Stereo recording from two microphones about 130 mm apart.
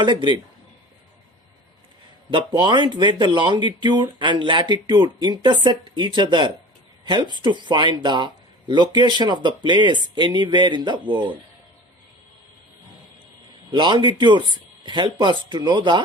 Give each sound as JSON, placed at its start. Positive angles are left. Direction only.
{"t": 0.0, "sound": "speech", "side_deg": -35}
{"t": 2.3, "sound": "speech", "side_deg": -35}
{"t": 13.7, "sound": "speech", "side_deg": -35}